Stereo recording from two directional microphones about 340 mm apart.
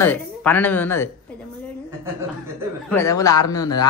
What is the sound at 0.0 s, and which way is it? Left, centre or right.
Speech, centre.